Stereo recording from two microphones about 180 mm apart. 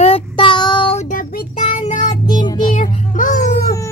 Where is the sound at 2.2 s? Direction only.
25° left (ahead or behind).